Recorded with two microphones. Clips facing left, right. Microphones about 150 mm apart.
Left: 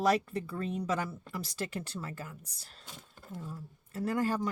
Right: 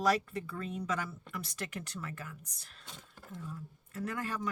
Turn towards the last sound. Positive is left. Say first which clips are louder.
# left 6 dB
turn(degrees=35)  # may be behind; listen again after turning